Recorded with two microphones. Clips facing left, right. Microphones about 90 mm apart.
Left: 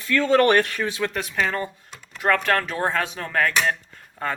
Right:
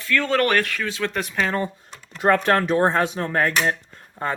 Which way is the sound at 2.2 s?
25° right (ahead or behind).